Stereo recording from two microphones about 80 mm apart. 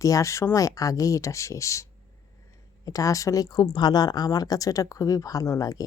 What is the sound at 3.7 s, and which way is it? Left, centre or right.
A woman's voice, left.